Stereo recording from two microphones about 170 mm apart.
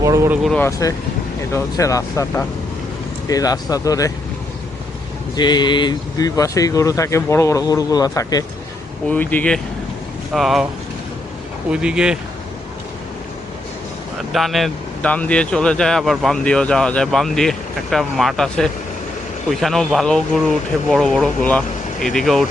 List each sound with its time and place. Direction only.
0.0 s speech: 15° right (ahead or behind)
0.4 s speech: 5° left (ahead or behind)
1.5 s speech: 20° left (ahead or behind)
5.4 s speech: 25° left (ahead or behind)
9.0 s speech: 10° left (ahead or behind)
11.7 s speech: 5° right (ahead or behind)
14.3 s speech: centre (ahead or behind)